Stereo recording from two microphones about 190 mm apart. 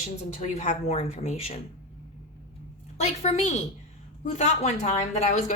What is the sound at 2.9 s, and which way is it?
Speech, 35° left (ahead or behind).